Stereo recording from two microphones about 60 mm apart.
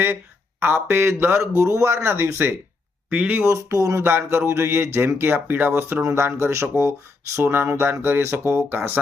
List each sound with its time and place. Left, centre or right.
0.6 s speech: right
3.1 s speech: right
3.4 s speech: right
6.0 s speech: right
7.4 s speech: right